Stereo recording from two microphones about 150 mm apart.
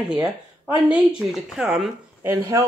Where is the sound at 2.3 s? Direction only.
20° right (ahead or behind).